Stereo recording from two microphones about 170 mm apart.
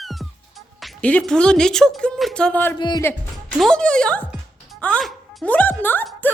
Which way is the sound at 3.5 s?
Centre (ahead or behind).